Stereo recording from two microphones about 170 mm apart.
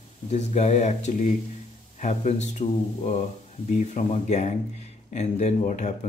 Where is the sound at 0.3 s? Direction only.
40° left (ahead or behind).